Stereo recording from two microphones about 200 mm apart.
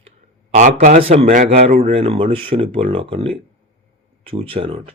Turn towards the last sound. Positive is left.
turn(degrees=-30)  # may be behind; listen again after turning